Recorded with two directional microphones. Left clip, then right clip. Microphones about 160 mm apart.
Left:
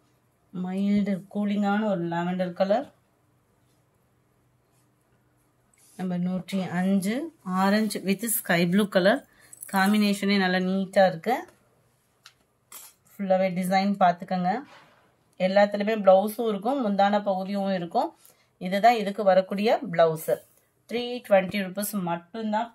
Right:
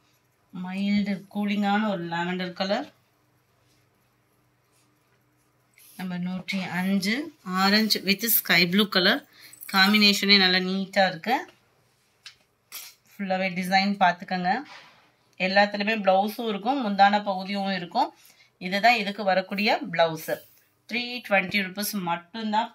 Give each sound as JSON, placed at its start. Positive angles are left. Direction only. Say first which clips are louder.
{"t": 0.5, "sound": "speech", "louder": "left 1 dB", "side_deg": 90}
{"t": 5.9, "sound": "speech", "louder": "left 3 dB", "side_deg": 90}
{"t": 13.2, "sound": "speech", "louder": "left 4 dB", "side_deg": 90}